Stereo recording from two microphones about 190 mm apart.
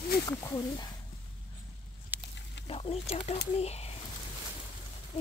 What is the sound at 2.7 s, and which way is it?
Speech, 30° left (ahead or behind).